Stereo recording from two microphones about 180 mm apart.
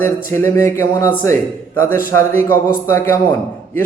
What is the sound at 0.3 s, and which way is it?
Speech, 15° left (ahead or behind).